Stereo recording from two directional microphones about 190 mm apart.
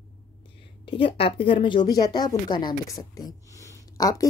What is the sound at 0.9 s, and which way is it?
A woman's voice, 30° left (ahead or behind).